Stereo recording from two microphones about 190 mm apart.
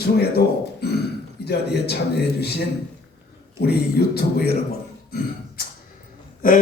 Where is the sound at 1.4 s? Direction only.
60° left (ahead or behind).